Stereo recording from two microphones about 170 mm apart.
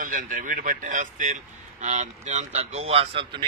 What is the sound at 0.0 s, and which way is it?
A man's voice, 55° right (ahead or behind).